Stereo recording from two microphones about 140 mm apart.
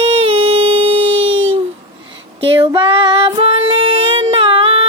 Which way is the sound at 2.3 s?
40° right (ahead or behind).